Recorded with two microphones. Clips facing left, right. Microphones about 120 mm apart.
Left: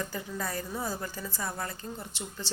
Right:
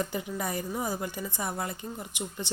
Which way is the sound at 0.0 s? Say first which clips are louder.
Right 3 dB; 20° right (ahead or behind).